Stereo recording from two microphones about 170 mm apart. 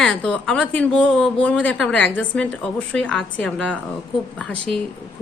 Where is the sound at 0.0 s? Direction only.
5° left (ahead or behind).